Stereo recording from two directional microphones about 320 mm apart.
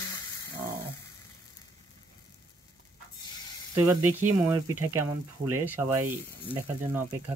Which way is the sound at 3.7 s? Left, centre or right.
Centre.